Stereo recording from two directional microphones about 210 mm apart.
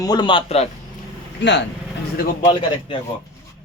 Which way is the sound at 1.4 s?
55° left (ahead or behind).